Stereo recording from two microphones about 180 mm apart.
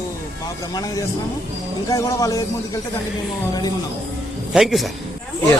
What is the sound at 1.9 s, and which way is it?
Speech, 20° left (ahead or behind).